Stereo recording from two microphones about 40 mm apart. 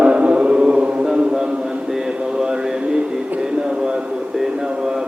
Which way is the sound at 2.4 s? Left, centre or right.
Centre.